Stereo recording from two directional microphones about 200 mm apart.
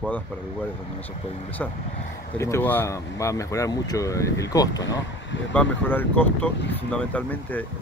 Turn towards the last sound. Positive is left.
turn(degrees=10)  # may be behind; listen again after turning